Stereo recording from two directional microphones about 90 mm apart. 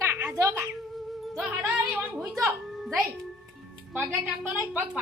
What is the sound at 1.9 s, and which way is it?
Speech, 20° right (ahead or behind).